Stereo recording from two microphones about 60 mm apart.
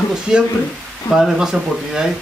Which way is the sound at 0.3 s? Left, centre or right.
Centre.